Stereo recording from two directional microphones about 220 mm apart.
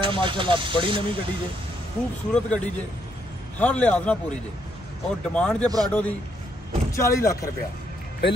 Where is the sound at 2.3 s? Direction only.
5° left (ahead or behind).